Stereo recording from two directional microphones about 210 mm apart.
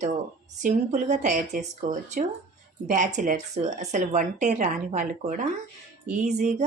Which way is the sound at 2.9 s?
35° right (ahead or behind).